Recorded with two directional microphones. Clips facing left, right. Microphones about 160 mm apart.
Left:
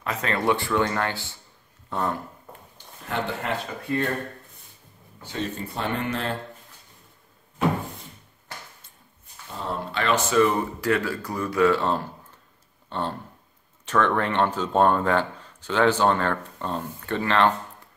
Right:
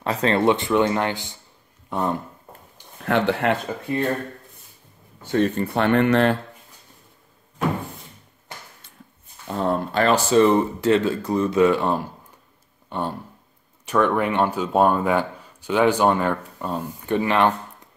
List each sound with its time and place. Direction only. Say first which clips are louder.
0.0 s speech: right 6 dB; 30° right (ahead or behind)
1.9 s a sound: right 3 dB; 15° right (ahead or behind)
3.1 s speech: right 8 dB; 75° right (ahead or behind)
5.2 s speech: right 10 dB; 55° right (ahead or behind)
9.5 s a sound: right 9 dB; 60° right (ahead or behind)
9.9 s speech: right 3 dB; 35° right (ahead or behind); by 17.5 s 15° right (ahead or behind)